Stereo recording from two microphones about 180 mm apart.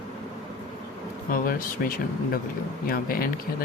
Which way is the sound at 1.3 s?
50° left (ahead or behind).